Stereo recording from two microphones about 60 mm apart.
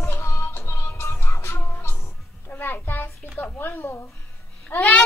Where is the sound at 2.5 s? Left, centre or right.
Left.